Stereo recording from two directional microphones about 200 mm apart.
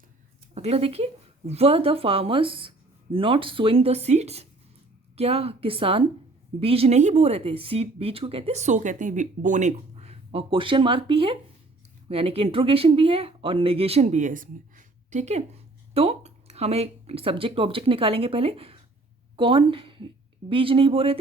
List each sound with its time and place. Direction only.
0.5 s speech: 30° right (ahead or behind)